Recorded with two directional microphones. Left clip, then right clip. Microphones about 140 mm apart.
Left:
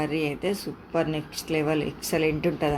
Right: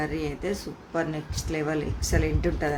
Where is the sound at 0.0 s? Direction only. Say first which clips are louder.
Left 3 dB; 20° left (ahead or behind).